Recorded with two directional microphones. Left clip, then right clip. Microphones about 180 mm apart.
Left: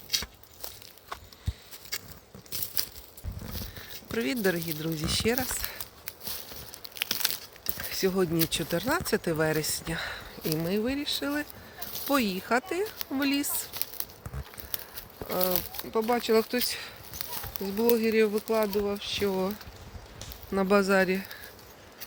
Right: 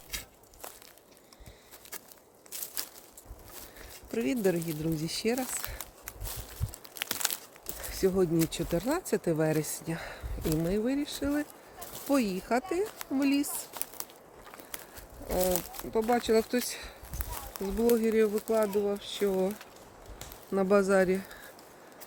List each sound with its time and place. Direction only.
4.1 s speech: centre (ahead or behind)
4.9 s speech: 50° left (ahead or behind)
5.2 s speech: centre (ahead or behind)
6.9 s a sound: 5° left (ahead or behind)
7.9 s speech: 5° right (ahead or behind)
15.4 s speech: centre (ahead or behind)
16.2 s speech: 5° right (ahead or behind)
16.6 s speech: 50° left (ahead or behind)
17.3 s a sound: centre (ahead or behind)
17.9 s speech: 5° right (ahead or behind)
18.3 s speech: 5° left (ahead or behind)
18.7 s speech: 15° right (ahead or behind)